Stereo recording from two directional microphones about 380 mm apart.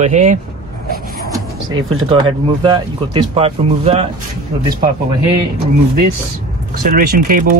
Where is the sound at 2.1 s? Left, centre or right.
Centre.